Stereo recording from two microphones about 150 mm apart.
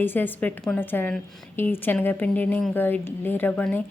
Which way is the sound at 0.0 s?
15° left (ahead or behind).